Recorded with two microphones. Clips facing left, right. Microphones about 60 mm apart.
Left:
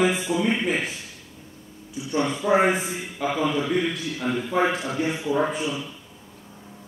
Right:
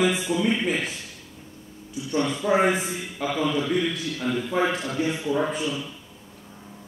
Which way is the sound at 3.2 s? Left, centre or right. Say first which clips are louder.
Left 1 dB; centre.